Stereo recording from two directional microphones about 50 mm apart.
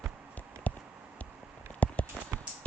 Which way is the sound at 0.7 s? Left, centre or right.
Left.